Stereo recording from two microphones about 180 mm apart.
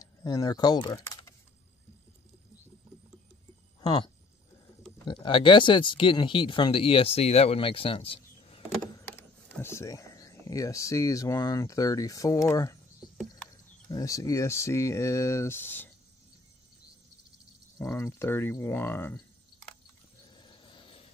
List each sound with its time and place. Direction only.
0.0 s speech: 20° left (ahead or behind)
3.8 s speech: 20° left (ahead or behind)
9.0 s speech: 10° left (ahead or behind)
13.8 s speech: 20° left (ahead or behind)
17.9 s speech: 15° left (ahead or behind)
20.3 s vehicle: 25° left (ahead or behind)